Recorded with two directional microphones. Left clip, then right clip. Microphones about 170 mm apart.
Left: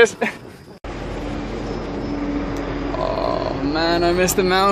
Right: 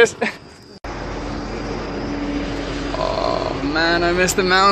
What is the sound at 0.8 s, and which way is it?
Vehicle, 25° right (ahead or behind).